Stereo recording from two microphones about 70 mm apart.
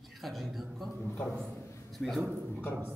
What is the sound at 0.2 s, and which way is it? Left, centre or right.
Speech, centre.